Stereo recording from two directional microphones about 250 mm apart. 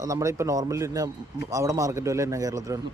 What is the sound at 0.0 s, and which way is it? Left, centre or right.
A man's voice, centre.